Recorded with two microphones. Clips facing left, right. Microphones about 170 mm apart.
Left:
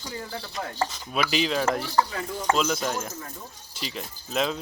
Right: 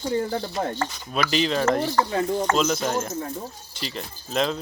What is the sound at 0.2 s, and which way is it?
Speech, 35° right (ahead or behind).